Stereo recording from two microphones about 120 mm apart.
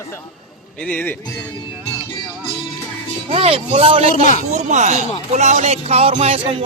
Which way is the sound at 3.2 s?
50° right (ahead or behind).